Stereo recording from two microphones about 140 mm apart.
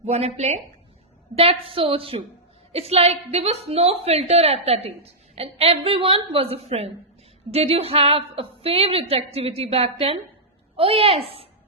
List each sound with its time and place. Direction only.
0.0 s a woman's voice: 50° right (ahead or behind)
1.4 s a woman's voice: 40° right (ahead or behind)